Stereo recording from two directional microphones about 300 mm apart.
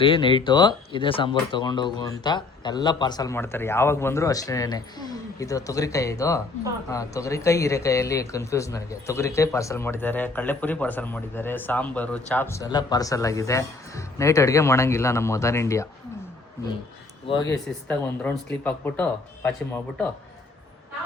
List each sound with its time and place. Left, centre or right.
0.0 s speech: centre
17.2 s speech: centre